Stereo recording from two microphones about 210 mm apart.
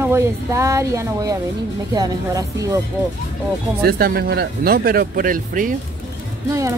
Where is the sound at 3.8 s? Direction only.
45° right (ahead or behind).